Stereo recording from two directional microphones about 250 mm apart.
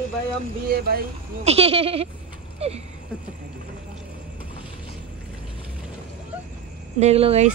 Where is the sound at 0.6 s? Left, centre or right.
Right.